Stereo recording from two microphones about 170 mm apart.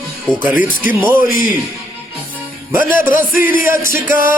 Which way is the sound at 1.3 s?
55° left (ahead or behind).